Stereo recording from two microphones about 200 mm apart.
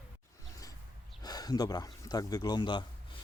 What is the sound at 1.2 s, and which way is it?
Speech, 20° left (ahead or behind).